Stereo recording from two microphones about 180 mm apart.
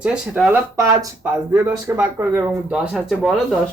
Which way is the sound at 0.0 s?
5° right (ahead or behind).